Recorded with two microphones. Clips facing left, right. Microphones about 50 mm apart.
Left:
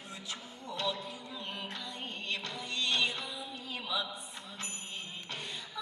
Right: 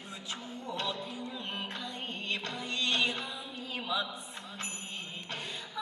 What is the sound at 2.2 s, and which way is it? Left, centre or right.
Music, right.